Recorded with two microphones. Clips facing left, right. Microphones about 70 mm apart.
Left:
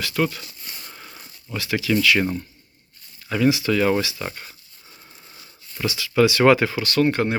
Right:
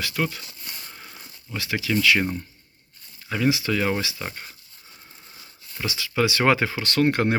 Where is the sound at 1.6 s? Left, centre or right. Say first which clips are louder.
Left 3 dB; right.